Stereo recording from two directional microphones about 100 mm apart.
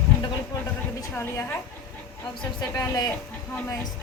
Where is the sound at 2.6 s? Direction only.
45° left (ahead or behind).